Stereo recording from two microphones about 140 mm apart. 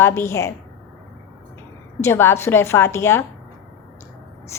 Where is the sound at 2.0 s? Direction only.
15° left (ahead or behind).